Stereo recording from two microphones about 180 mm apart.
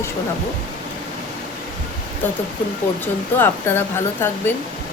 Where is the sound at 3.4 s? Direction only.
10° left (ahead or behind).